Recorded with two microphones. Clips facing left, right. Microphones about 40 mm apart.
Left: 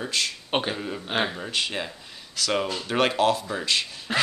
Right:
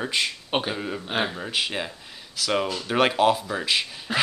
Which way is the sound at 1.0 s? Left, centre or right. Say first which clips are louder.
Left 2 dB; centre.